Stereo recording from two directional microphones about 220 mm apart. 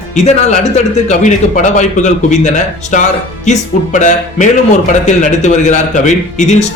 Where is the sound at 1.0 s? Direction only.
35° left (ahead or behind).